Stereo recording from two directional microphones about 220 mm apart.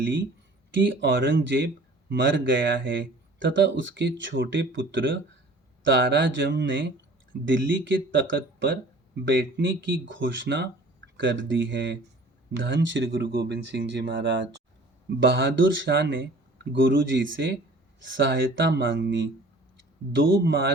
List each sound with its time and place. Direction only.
0.0 s speech: 55° right (ahead or behind)